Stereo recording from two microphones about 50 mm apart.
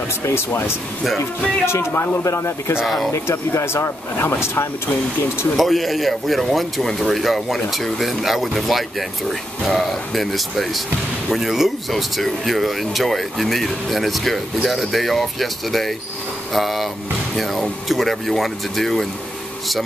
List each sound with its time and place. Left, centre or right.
0.2 s speech: left
1.0 s speech: centre
1.7 s speech: left
2.8 s speech: centre
3.1 s speech: left
4.8 s speech: left
5.6 s speech: centre
11.9 s speech: centre